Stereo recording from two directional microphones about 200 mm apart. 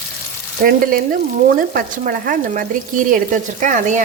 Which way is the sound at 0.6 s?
45° right (ahead or behind).